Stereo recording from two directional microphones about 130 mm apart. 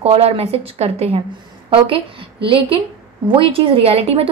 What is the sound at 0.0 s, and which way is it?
A woman's voice, 50° right (ahead or behind).